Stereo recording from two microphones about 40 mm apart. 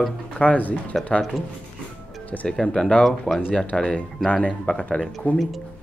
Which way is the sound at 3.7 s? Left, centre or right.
Left.